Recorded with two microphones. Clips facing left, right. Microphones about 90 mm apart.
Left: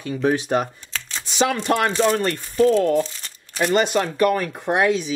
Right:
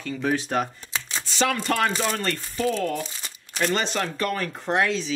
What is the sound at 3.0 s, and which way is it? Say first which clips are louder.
Crumpling: even; 5° right (ahead or behind).